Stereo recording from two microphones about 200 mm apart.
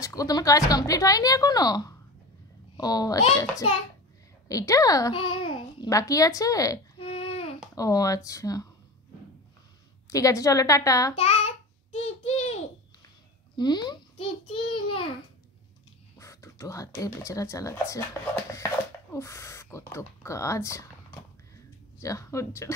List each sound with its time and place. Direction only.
0.0 s a child's voice: 15° left (ahead or behind)
4.5 s a child's voice: 15° left (ahead or behind)
7.0 s a sound: 30° left (ahead or behind)
7.7 s a child's voice: 15° left (ahead or behind)
10.0 s a child's voice: 15° left (ahead or behind)
11.1 s child singing: 30° left (ahead or behind)
13.6 s a child's voice: 20° left (ahead or behind)
16.2 s speech: 15° left (ahead or behind)
19.1 s a child's voice: 15° left (ahead or behind)
21.9 s a child's voice: 15° left (ahead or behind)